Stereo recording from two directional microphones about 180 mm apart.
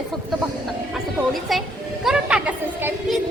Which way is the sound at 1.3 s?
Centre (ahead or behind).